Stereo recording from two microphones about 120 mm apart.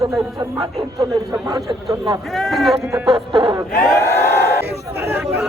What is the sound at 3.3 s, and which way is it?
Speech, 40° right (ahead or behind).